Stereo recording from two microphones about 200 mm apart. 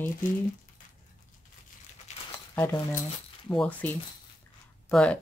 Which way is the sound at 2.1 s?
35° left (ahead or behind).